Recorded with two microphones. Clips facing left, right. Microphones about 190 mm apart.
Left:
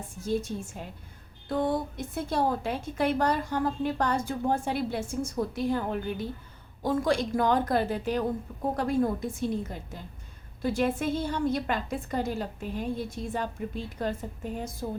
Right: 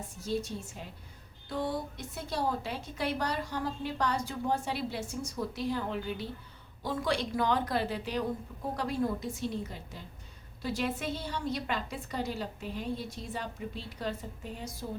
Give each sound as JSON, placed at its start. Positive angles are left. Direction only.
{"t": 0.2, "sound": "a woman's voice", "side_deg": 50}